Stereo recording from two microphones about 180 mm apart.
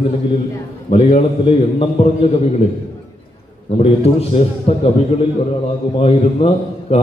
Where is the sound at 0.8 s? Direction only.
30° left (ahead or behind).